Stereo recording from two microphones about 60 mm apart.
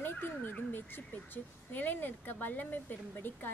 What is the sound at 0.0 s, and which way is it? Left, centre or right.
A woman's voice, left.